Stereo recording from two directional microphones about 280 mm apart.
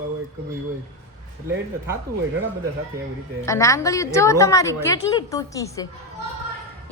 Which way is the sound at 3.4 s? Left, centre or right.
Centre.